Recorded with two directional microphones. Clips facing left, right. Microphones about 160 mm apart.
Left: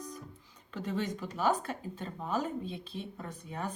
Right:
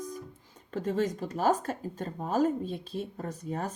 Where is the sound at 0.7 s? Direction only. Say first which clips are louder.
Right 5 dB; 45° right (ahead or behind).